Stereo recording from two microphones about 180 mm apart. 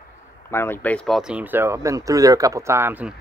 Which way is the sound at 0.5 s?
15° left (ahead or behind).